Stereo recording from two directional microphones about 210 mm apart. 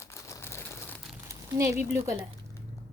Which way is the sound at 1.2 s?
15° right (ahead or behind).